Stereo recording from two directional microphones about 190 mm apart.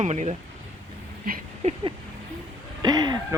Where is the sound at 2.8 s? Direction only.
20° right (ahead or behind).